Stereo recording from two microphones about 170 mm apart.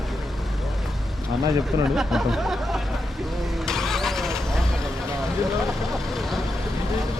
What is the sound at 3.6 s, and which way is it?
Vehicle, centre (ahead or behind).